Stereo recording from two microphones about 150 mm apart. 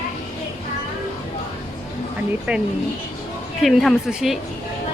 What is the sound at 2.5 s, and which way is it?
A woman's voice, 10° right (ahead or behind).